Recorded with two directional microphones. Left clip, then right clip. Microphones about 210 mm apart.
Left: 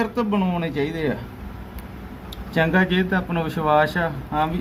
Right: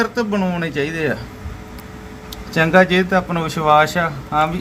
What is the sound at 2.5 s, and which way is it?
Speech, 25° right (ahead or behind).